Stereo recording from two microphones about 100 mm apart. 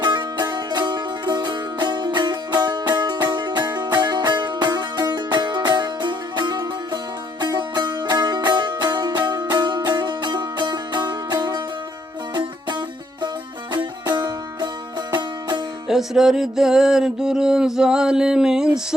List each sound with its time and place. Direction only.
0.0 s music: 50° right (ahead or behind)
15.9 s music: 5° right (ahead or behind)